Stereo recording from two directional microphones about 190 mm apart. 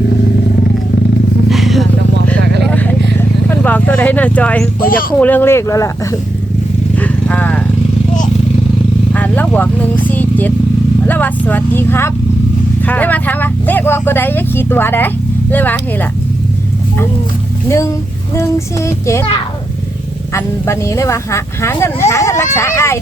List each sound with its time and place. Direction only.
1.5 s a sound: centre (ahead or behind)
2.6 s vehicle: 5° left (ahead or behind)
4.8 s speech: 50° left (ahead or behind)
5.1 s speech: 10° left (ahead or behind)
6.9 s vehicle: 10° left (ahead or behind)
9.1 s speech: 10° left (ahead or behind)
17.7 s speech: 15° left (ahead or behind)
20.3 s speech: 15° left (ahead or behind)